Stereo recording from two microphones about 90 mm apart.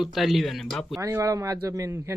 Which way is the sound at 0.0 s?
Centre (ahead or behind).